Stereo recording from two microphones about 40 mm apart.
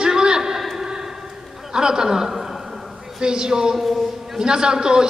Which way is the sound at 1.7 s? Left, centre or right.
Centre.